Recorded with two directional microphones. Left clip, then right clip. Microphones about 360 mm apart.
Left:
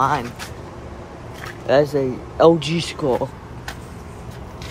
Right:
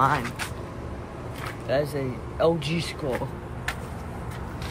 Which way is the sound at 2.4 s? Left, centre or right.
Centre.